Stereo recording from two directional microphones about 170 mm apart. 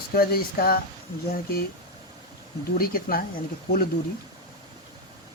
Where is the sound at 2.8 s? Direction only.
60° left (ahead or behind).